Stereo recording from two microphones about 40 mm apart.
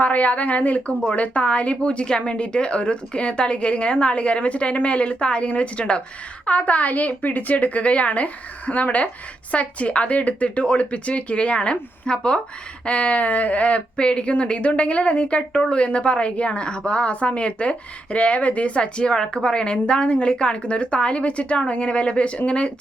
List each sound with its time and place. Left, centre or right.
0.0 s a woman's voice: left
12.8 s speech: left